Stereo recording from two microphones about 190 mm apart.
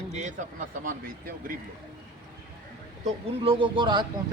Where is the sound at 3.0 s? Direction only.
30° right (ahead or behind).